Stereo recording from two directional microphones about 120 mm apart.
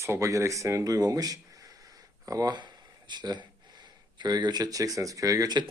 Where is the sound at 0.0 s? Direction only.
25° right (ahead or behind).